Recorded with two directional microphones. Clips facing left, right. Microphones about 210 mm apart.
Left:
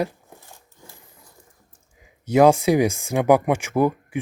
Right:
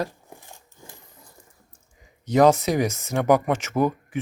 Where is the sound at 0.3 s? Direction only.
15° right (ahead or behind).